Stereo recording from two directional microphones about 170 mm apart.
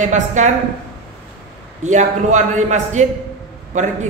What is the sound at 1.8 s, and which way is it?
A man's voice, 45° right (ahead or behind).